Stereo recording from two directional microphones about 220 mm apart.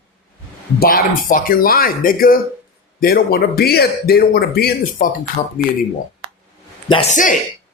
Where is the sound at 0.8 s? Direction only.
40° left (ahead or behind).